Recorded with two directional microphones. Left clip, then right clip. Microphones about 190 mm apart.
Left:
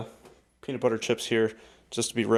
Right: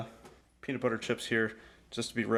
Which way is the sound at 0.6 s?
25° left (ahead or behind).